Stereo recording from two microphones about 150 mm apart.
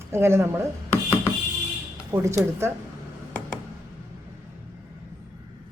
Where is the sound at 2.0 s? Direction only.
20° right (ahead or behind).